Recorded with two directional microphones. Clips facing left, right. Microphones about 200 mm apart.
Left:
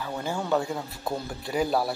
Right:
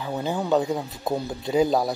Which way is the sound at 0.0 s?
20° right (ahead or behind).